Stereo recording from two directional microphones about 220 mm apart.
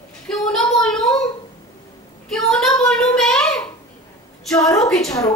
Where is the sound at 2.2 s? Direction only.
Centre (ahead or behind).